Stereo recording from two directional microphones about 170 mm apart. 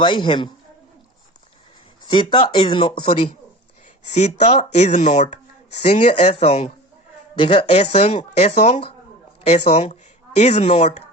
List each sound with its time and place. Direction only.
0.0 s a man's voice: 30° left (ahead or behind)
2.0 s speech: 30° left (ahead or behind)
4.0 s speech: 45° left (ahead or behind)